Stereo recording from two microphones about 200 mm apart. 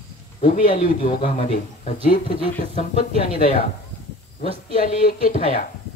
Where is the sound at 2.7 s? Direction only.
35° left (ahead or behind).